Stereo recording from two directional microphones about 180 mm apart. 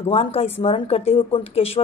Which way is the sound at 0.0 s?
35° left (ahead or behind).